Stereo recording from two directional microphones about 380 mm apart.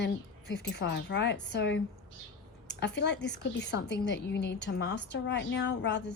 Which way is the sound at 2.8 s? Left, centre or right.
Left.